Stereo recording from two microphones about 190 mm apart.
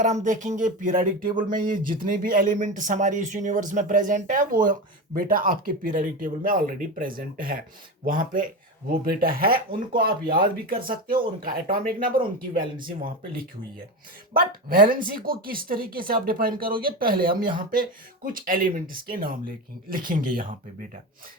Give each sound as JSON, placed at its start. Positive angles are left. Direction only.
{"t": 0.0, "sound": "speech", "side_deg": -40}